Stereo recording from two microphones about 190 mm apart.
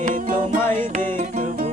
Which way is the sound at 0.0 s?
45° right (ahead or behind).